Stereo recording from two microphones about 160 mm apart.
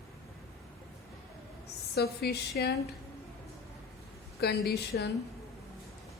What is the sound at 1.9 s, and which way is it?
Speech, 85° left.